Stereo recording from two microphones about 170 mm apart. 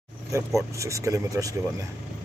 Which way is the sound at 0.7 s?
15° right (ahead or behind).